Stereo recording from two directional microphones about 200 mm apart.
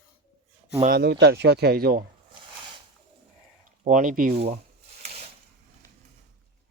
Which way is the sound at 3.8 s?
40° right (ahead or behind).